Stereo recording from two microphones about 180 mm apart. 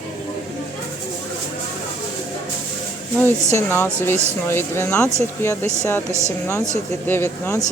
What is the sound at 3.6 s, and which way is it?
Speech, 10° left (ahead or behind).